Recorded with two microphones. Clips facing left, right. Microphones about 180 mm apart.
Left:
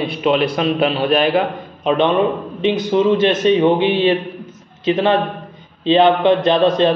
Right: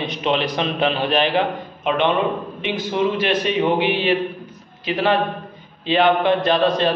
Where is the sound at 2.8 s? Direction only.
20° left (ahead or behind).